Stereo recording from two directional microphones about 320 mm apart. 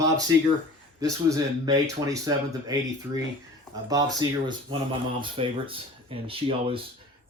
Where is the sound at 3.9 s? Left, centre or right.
Centre.